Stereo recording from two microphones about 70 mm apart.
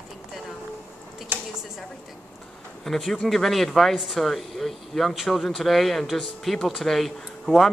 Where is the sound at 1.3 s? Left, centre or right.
Right.